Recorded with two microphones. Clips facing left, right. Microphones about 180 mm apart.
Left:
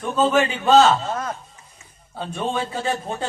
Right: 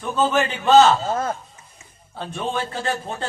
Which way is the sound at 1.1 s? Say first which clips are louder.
Right 3 dB; 30° right (ahead or behind).